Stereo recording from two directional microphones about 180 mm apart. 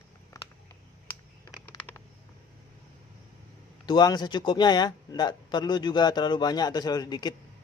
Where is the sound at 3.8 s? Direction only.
25° left (ahead or behind).